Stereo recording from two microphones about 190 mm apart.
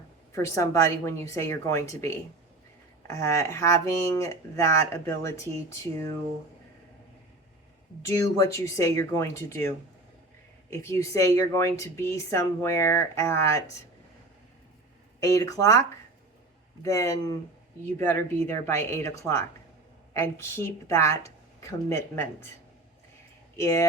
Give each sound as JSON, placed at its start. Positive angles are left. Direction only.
{"t": 0.3, "sound": "speech", "side_deg": 15}
{"t": 8.0, "sound": "speech", "side_deg": 15}
{"t": 10.8, "sound": "speech", "side_deg": 15}
{"t": 15.2, "sound": "speech", "side_deg": 15}
{"t": 23.6, "sound": "speech", "side_deg": 15}